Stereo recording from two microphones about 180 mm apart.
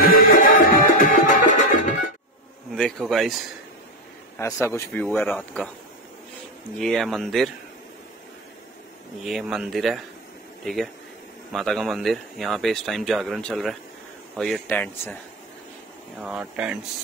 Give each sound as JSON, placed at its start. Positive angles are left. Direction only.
{"t": 0.0, "sound": "music", "side_deg": 50}
{"t": 2.7, "sound": "speech", "side_deg": 0}
{"t": 4.4, "sound": "a man's voice", "side_deg": 15}
{"t": 6.8, "sound": "speech", "side_deg": 0}
{"t": 9.2, "sound": "speech", "side_deg": 0}
{"t": 16.2, "sound": "speech", "side_deg": -5}